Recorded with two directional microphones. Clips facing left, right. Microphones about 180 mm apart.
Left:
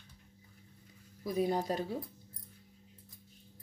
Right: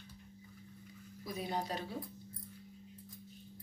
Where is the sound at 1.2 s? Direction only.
45° left (ahead or behind).